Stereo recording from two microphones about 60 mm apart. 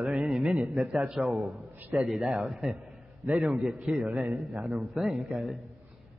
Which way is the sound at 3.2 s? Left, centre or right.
Right.